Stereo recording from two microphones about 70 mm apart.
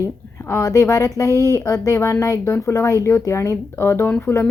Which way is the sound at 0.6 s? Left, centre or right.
Left.